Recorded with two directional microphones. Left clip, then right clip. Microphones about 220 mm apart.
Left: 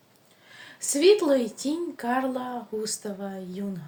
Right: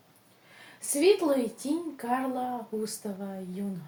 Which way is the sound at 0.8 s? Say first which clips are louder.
Left 4 dB; 35° left (ahead or behind).